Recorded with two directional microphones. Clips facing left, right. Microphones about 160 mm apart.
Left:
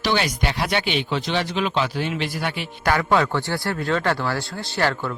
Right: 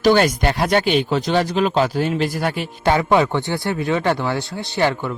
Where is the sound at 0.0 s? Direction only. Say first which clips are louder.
Right 8 dB; 45° right (ahead or behind).